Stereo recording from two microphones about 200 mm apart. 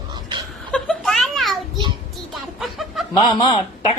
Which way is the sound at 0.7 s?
5° left (ahead or behind).